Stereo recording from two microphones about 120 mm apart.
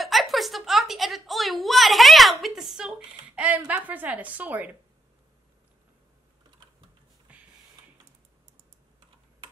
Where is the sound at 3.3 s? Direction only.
10° right (ahead or behind).